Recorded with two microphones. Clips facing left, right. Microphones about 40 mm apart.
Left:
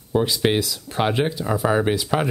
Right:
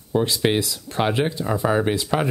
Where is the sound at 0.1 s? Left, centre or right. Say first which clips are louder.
Even; centre.